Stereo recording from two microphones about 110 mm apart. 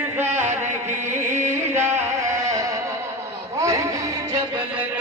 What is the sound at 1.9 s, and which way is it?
Music, 30° right (ahead or behind).